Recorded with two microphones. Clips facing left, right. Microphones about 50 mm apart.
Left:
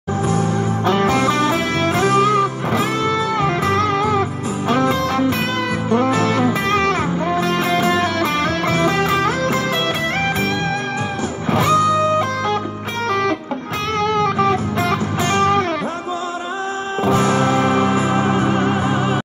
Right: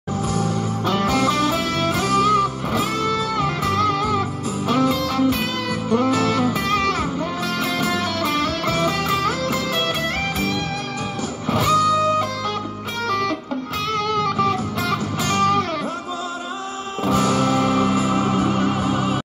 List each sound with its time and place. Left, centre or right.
0.3 s music: left
11.5 s music: left
17.0 s music: left